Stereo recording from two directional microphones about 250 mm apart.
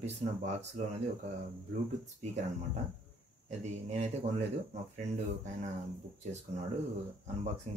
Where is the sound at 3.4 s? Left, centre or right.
Right.